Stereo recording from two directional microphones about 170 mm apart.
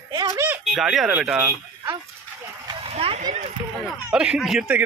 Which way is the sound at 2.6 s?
35° right (ahead or behind).